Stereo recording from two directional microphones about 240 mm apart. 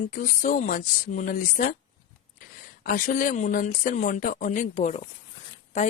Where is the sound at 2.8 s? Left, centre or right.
Left.